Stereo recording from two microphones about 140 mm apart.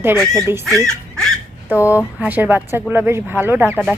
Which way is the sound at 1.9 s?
10° right (ahead or behind).